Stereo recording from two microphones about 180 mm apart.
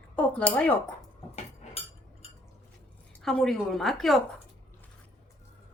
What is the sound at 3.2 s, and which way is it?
Speech, centre (ahead or behind).